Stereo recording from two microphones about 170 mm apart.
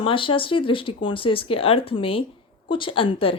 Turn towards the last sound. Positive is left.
turn(degrees=30)  # may be behind; listen again after turning